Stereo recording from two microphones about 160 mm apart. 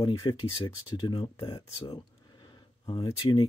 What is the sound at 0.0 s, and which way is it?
Speech, 30° left (ahead or behind).